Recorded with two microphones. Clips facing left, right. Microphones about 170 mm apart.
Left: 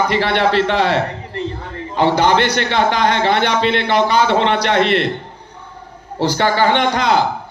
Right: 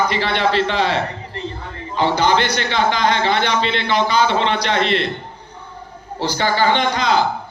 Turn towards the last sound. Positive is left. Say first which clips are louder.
# left 2 dB
turn(degrees=60)  # may be behind; listen again after turning